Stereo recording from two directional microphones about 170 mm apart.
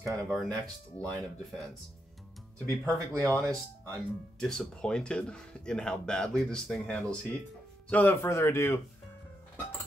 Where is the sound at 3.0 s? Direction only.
20° right (ahead or behind).